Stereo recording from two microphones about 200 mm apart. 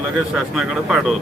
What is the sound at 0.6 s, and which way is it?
Speech, centre (ahead or behind).